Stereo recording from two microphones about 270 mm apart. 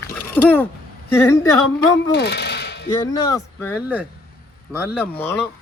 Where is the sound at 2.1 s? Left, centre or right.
Left.